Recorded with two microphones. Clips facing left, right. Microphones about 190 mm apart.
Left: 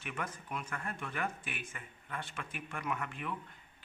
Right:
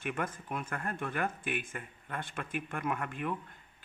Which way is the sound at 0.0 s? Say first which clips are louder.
Right 6 dB; 50° right (ahead or behind).